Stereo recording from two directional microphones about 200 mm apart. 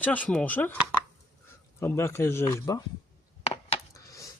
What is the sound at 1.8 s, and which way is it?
Speech, 10° left (ahead or behind).